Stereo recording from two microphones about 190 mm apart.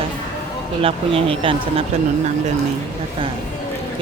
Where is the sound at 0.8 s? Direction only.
30° right (ahead or behind).